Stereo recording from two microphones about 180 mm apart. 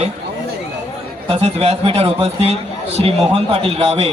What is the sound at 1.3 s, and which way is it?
A man's voice, 30° right (ahead or behind).